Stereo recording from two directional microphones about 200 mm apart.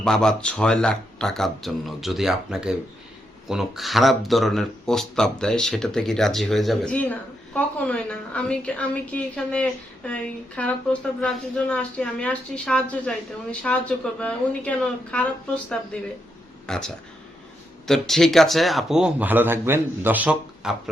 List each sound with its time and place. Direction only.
0.0 s speech: 5° left (ahead or behind)